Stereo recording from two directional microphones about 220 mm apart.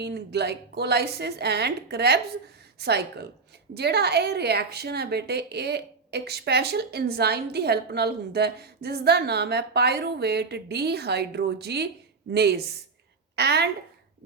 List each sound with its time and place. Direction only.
0.0 s a woman's voice: 50° right (ahead or behind)